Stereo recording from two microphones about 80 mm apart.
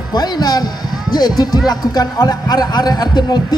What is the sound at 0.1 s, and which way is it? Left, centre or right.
Speech, left.